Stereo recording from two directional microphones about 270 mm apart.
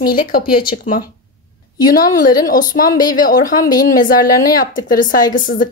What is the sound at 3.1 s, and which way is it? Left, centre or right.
Speech, left.